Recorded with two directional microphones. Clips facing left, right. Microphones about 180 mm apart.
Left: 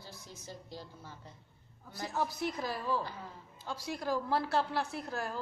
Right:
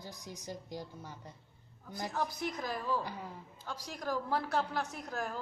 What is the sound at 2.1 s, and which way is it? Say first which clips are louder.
A woman's voice: left 3 dB; 5° left (ahead or behind).